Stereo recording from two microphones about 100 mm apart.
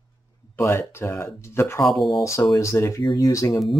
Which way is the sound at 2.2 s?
30° left (ahead or behind).